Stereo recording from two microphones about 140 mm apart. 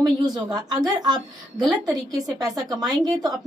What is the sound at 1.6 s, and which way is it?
Speech, centre (ahead or behind).